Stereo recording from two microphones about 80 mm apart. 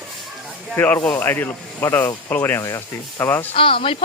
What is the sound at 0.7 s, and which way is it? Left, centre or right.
Speech, left.